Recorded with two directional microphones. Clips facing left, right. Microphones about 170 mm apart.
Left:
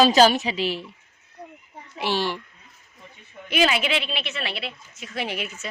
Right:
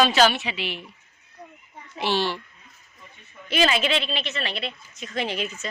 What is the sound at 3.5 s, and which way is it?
A woman's voice, 10° left (ahead or behind).